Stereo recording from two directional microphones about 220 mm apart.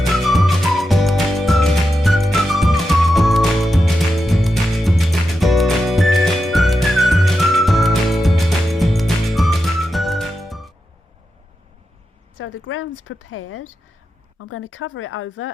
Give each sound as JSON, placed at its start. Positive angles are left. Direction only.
{"t": 0.1, "sound": "music", "side_deg": 0}
{"t": 12.4, "sound": "a sound", "side_deg": 60}
{"t": 14.3, "sound": "speech", "side_deg": 70}